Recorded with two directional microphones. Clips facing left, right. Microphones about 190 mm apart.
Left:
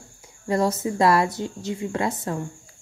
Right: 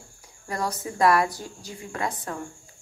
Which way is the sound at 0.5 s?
25° left (ahead or behind).